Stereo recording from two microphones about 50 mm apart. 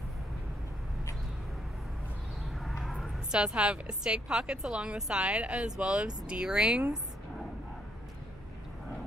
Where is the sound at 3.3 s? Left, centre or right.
Centre.